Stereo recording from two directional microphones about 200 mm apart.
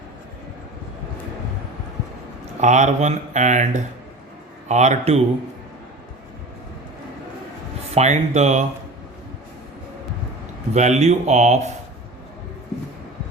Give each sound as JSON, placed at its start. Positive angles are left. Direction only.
{"t": 2.6, "sound": "speech", "side_deg": -35}
{"t": 4.7, "sound": "speech", "side_deg": -35}
{"t": 7.9, "sound": "speech", "side_deg": -35}
{"t": 10.8, "sound": "speech", "side_deg": -35}